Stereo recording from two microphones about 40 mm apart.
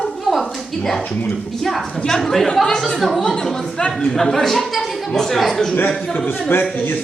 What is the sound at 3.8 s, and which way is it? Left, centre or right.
Speech, left.